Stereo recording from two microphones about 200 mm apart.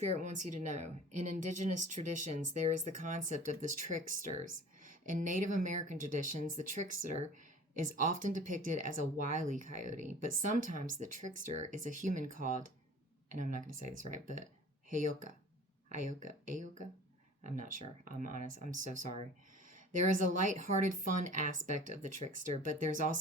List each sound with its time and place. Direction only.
0.0 s a woman's voice: 35° right (ahead or behind)
15.9 s a woman's voice: 40° right (ahead or behind)
20.4 s a woman's voice: 40° right (ahead or behind)